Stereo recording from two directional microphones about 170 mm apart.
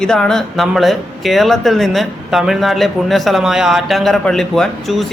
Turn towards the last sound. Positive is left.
turn(degrees=0)  # may be behind; listen again after turning